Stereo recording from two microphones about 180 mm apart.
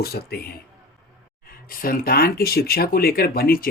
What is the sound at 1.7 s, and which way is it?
Speech, 55° left (ahead or behind).